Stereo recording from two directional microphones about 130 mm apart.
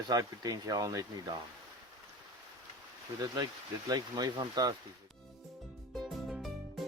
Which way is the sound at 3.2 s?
30° right (ahead or behind).